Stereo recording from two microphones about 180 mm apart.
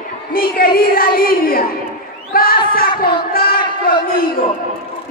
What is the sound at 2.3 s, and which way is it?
Crowd, 55° left (ahead or behind).